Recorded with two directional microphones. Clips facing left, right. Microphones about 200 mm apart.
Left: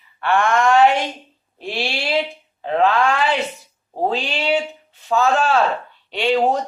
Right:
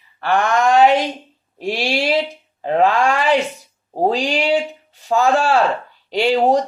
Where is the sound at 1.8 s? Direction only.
40° right (ahead or behind).